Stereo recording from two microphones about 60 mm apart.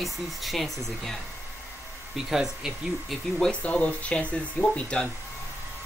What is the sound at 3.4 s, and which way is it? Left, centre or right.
Speech, left.